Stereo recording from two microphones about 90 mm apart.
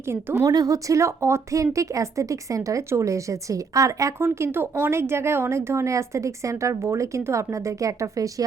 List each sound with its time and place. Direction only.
0.1 s a woman's voice: 30° right (ahead or behind)
0.5 s speech: 40° right (ahead or behind)